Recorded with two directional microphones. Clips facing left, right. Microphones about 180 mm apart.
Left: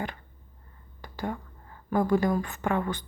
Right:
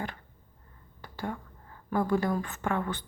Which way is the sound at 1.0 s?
15° left (ahead or behind).